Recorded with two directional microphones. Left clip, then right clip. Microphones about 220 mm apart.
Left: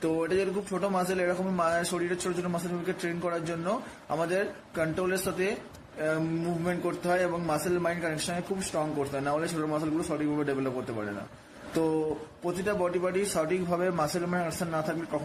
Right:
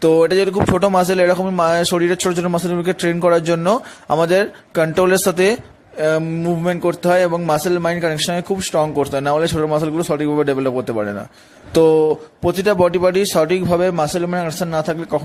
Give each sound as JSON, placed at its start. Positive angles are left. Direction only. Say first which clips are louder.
{"t": 0.0, "sound": "speech", "louder": "right 15 dB", "side_deg": -50}
{"t": 6.7, "sound": "speech", "louder": "right 14 dB", "side_deg": -50}
{"t": 12.5, "sound": "speech", "louder": "right 15 dB", "side_deg": -45}